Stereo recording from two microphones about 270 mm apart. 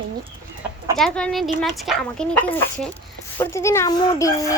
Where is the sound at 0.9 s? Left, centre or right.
Centre.